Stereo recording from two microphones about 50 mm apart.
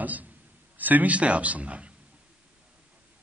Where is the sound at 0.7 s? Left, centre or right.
Right.